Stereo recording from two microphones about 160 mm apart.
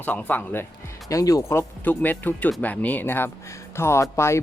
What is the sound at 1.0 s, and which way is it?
Speech, 20° left (ahead or behind).